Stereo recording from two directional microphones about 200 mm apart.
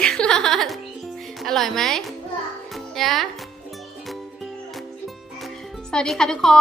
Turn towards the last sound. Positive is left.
turn(degrees=0)  # may be behind; listen again after turning